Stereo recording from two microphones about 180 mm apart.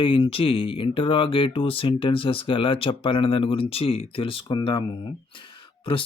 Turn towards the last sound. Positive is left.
turn(degrees=30)  # may be behind; listen again after turning